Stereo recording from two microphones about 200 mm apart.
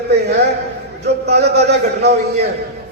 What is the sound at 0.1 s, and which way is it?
A man's voice, 55° right (ahead or behind).